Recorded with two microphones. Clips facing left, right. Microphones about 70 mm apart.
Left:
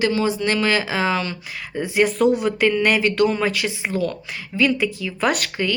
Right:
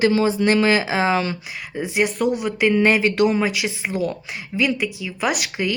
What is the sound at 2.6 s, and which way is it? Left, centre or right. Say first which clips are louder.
Speech: right 1 dB; centre.